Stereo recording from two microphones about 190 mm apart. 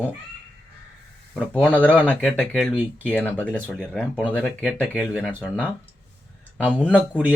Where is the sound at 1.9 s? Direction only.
10° right (ahead or behind).